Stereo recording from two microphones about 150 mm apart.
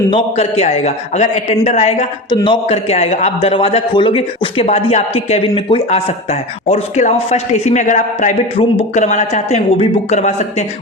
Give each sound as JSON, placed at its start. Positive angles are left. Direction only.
{"t": 0.1, "sound": "a man's voice", "side_deg": 40}